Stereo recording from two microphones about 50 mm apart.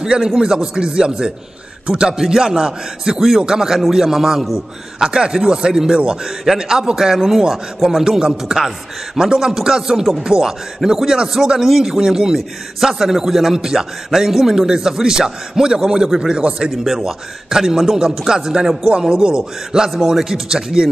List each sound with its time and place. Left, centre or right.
0.0 s a man's voice: centre
4.9 s a man's voice: centre
16.7 s a man's voice: centre
18.9 s a man's voice: centre